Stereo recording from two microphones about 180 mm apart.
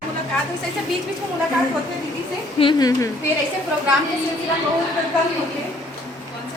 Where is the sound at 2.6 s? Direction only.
25° left (ahead or behind).